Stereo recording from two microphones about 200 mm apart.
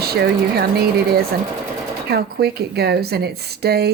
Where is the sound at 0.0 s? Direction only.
50° right (ahead or behind).